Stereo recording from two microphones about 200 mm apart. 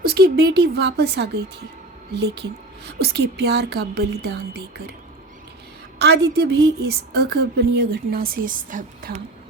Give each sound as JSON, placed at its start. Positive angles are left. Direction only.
{"t": 0.0, "sound": "a woman's voice", "side_deg": -50}
{"t": 6.0, "sound": "a woman's voice", "side_deg": -55}